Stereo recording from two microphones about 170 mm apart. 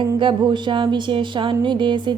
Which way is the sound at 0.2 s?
30° right (ahead or behind).